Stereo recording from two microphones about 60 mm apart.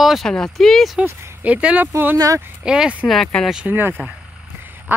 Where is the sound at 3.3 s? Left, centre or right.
Centre.